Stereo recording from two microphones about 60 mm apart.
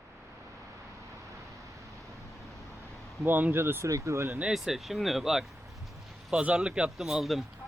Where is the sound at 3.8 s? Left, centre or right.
Right.